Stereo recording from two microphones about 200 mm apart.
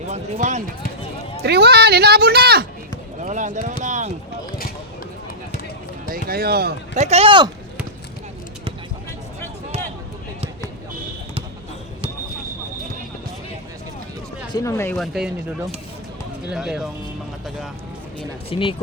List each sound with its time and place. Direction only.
0.1 s speech: 35° right (ahead or behind)
1.4 s speech: 55° right (ahead or behind)
3.2 s speech: 40° right (ahead or behind)
6.1 s speech: 50° right (ahead or behind)
6.9 s speech: 35° right (ahead or behind)
14.5 s speech: 15° left (ahead or behind)
14.9 s speech: centre (ahead or behind)
18.5 s speech: 25° left (ahead or behind)